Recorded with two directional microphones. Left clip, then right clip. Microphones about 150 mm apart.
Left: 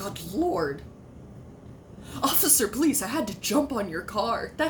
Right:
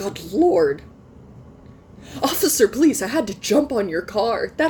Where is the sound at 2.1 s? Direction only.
35° right (ahead or behind).